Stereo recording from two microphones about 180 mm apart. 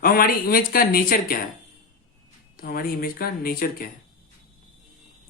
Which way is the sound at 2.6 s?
55° left (ahead or behind).